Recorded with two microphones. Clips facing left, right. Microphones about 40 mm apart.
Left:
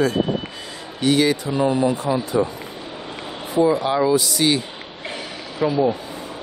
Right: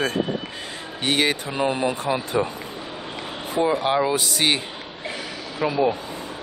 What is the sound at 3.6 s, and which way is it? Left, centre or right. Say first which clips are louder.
Speech: left 3 dB; right.